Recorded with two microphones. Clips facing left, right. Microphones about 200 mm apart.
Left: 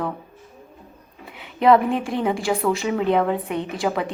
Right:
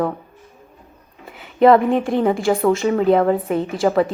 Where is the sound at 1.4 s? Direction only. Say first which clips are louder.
Right 4 dB; centre (ahead or behind).